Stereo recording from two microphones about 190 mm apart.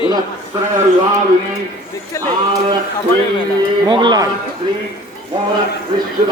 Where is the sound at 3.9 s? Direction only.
25° right (ahead or behind).